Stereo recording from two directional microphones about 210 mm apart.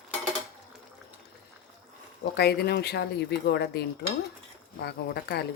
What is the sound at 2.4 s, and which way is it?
Speech, 50° left (ahead or behind).